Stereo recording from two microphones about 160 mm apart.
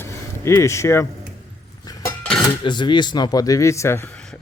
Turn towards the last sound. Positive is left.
turn(degrees=15)  # may be behind; listen again after turning